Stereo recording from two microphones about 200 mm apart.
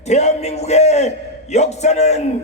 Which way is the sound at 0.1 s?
35° left (ahead or behind).